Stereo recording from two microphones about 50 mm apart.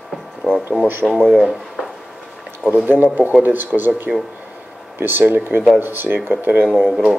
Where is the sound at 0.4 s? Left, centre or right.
Centre.